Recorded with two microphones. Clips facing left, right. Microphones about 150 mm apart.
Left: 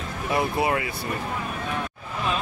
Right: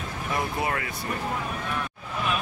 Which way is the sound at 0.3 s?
20° left (ahead or behind).